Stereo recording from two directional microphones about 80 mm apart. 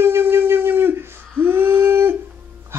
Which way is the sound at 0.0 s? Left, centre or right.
Right.